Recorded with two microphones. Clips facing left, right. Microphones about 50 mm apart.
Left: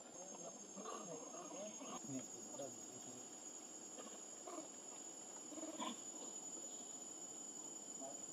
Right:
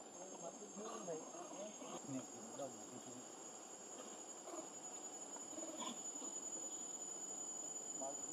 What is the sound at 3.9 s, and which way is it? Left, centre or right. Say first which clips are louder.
Insect: right 1 dB; centre.